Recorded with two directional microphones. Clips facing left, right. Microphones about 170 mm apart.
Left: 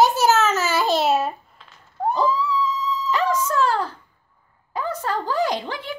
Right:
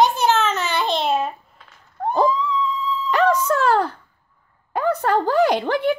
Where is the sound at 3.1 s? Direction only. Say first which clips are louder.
Right 5 dB; 60° right (ahead or behind).